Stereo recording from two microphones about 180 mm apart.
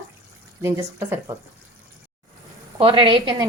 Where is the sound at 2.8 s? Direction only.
30° right (ahead or behind).